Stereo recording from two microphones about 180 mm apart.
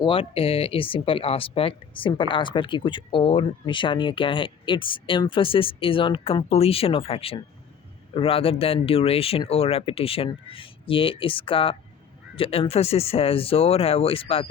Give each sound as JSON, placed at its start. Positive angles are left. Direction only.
{"t": 0.0, "sound": "speech", "side_deg": 30}